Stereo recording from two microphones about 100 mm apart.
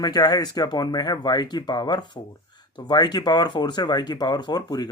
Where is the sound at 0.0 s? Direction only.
40° left (ahead or behind).